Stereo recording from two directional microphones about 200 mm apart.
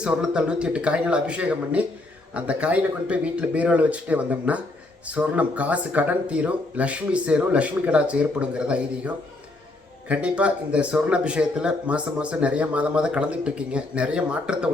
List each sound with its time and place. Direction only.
0.0 s speech: 5° right (ahead or behind)
10.1 s speech: 5° right (ahead or behind)